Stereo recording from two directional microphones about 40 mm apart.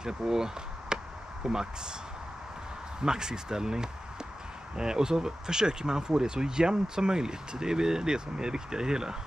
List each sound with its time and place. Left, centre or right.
0.0 s speech: centre
3.0 s speech: centre